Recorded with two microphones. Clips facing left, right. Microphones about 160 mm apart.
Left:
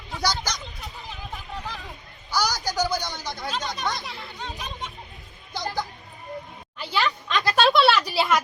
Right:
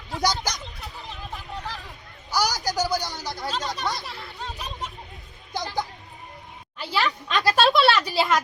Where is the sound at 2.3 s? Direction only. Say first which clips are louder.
Right 1 dB; 45° right (ahead or behind).